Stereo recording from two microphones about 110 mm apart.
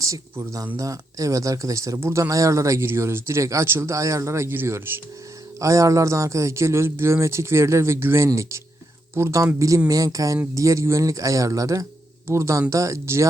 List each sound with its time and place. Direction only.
0.0 s speech: 30° right (ahead or behind)